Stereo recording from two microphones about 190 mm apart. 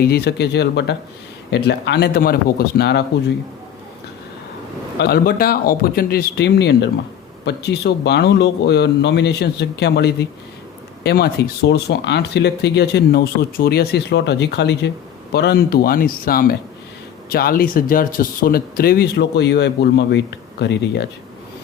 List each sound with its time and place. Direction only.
0.0 s speech: 55° left (ahead or behind)
4.9 s speech: 55° left (ahead or behind)